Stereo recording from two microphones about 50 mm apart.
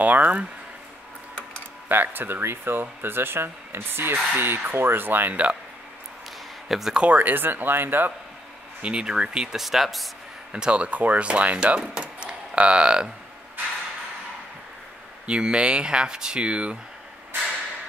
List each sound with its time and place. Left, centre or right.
0.0 s speech: right
1.9 s speech: right
5.3 s speech: right
6.7 s speech: centre
7.0 s speech: right
8.8 s speech: centre
9.6 s speech: centre
10.5 s speech: right
12.0 s a sound: right
15.2 s speech: centre